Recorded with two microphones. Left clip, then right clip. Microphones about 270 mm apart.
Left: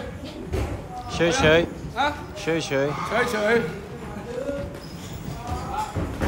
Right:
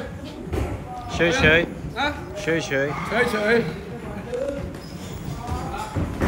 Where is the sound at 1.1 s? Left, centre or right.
Centre.